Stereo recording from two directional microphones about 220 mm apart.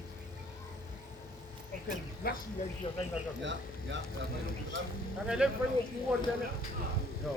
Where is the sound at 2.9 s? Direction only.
25° left (ahead or behind).